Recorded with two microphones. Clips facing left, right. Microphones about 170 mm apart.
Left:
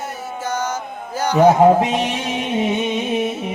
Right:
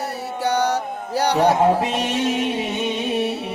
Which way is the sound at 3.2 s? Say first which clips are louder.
Left 1 dB; 70° right (ahead or behind).